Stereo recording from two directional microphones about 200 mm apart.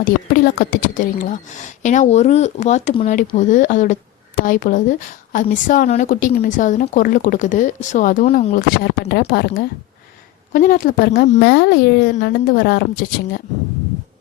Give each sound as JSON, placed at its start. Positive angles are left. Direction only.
{"t": 0.0, "sound": "a woman's voice", "side_deg": 45}